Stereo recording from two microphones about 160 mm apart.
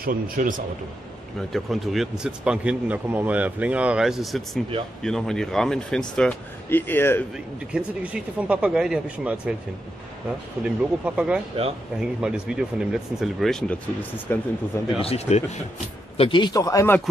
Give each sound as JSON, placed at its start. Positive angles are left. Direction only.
{"t": 0.0, "sound": "speech", "side_deg": -60}
{"t": 1.5, "sound": "speech", "side_deg": 0}
{"t": 7.3, "sound": "speech", "side_deg": -5}
{"t": 10.6, "sound": "speech", "side_deg": -5}
{"t": 15.0, "sound": "speech", "side_deg": 40}
{"t": 16.2, "sound": "speech", "side_deg": 30}